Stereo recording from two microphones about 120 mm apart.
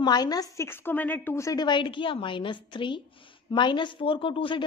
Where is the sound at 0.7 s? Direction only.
20° left (ahead or behind).